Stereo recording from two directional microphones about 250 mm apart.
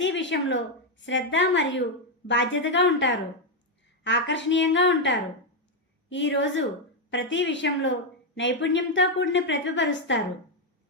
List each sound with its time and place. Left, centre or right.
0.0 s a woman's voice: left